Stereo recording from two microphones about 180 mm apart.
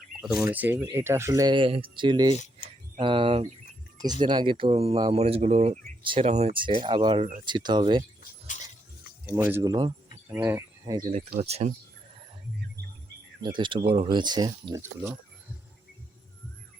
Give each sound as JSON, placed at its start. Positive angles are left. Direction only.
{"t": 0.2, "sound": "speech", "side_deg": -5}
{"t": 2.3, "sound": "speech", "side_deg": 40}
{"t": 3.0, "sound": "speech", "side_deg": -30}
{"t": 9.2, "sound": "speech", "side_deg": -15}
{"t": 11.4, "sound": "speech", "side_deg": -35}
{"t": 13.4, "sound": "speech", "side_deg": -25}